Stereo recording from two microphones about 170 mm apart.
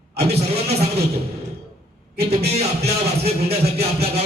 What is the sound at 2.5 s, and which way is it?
Speech, 40° right (ahead or behind).